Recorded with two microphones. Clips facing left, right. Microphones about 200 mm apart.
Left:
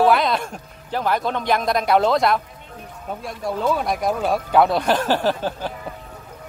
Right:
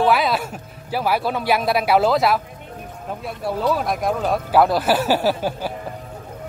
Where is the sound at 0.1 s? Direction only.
5° right (ahead or behind).